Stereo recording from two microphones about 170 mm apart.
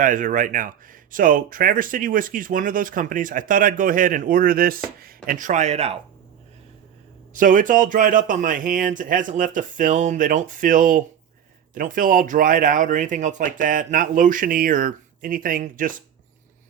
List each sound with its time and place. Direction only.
0.0 s speech: 50° right (ahead or behind)
7.3 s speech: 50° right (ahead or behind)